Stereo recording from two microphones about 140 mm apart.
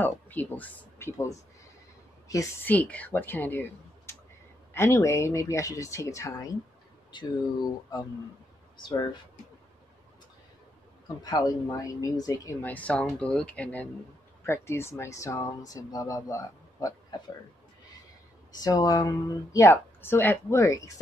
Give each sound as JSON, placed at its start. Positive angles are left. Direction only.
{"t": 0.0, "sound": "speech", "side_deg": 10}
{"t": 2.6, "sound": "speech", "side_deg": 10}
{"t": 7.1, "sound": "speech", "side_deg": 35}
{"t": 8.8, "sound": "speech", "side_deg": 35}
{"t": 11.2, "sound": "speech", "side_deg": 25}
{"t": 12.6, "sound": "speech", "side_deg": 10}
{"t": 18.6, "sound": "speech", "side_deg": 25}